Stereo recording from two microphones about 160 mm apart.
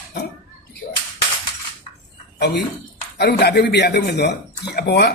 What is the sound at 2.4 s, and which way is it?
A man's voice, 90° left.